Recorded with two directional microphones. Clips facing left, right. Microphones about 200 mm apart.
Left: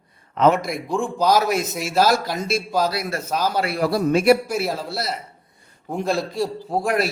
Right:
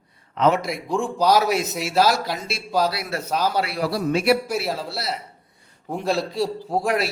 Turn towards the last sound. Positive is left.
turn(degrees=0)  # may be behind; listen again after turning